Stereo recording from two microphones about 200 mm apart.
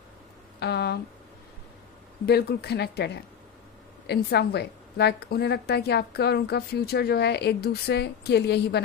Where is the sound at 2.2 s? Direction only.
55° left (ahead or behind).